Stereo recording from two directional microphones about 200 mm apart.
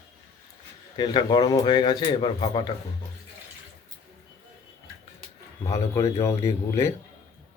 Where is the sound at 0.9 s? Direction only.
20° left (ahead or behind).